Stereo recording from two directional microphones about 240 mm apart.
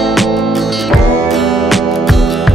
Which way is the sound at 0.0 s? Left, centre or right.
Centre.